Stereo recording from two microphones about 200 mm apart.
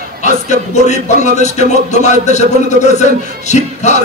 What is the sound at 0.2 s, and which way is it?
Speech, 35° left (ahead or behind).